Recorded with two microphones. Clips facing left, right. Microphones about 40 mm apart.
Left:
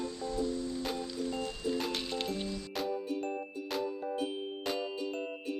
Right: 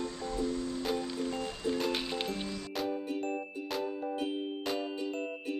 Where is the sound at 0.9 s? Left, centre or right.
Right.